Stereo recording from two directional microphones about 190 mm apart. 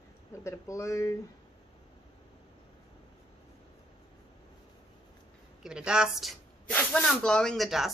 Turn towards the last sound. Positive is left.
turn(degrees=0)  # may be behind; listen again after turning